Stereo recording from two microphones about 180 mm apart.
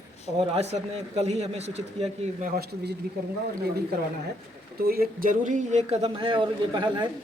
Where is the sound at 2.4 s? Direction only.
50° right (ahead or behind).